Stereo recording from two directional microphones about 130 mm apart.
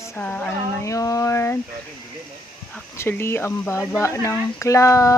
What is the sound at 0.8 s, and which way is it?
Speech, 25° left (ahead or behind).